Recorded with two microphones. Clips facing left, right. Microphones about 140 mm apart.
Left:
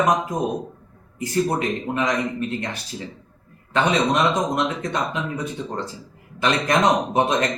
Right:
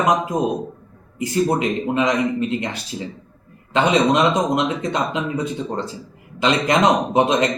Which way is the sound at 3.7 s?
20° right (ahead or behind).